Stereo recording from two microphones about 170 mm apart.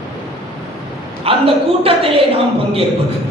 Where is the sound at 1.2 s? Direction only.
35° right (ahead or behind).